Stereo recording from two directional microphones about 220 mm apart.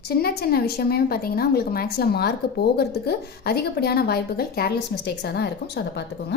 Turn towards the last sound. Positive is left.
turn(degrees=50)  # may be behind; listen again after turning